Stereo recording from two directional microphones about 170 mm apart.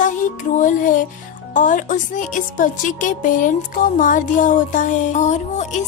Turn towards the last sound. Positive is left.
turn(degrees=45)  # may be behind; listen again after turning